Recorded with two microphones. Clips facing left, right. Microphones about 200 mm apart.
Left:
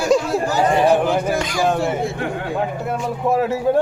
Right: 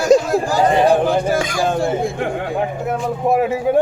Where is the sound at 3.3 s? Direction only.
15° right (ahead or behind).